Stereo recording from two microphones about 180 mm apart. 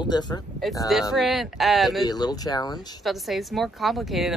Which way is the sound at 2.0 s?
20° left (ahead or behind).